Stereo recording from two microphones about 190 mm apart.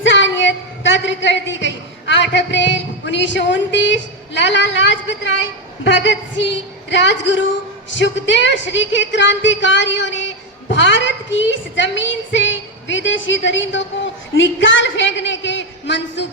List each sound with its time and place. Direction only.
0.0 s a woman's voice: 80° left